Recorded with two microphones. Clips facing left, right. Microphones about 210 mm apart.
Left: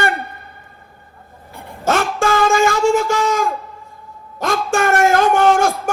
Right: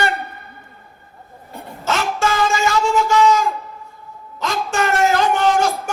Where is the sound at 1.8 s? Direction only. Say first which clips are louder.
Left 3 dB; 50° left (ahead or behind).